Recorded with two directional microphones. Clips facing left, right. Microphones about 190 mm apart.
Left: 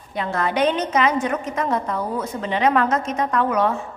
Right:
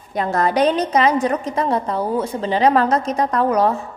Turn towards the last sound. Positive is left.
turn(degrees=-35)  # may be behind; listen again after turning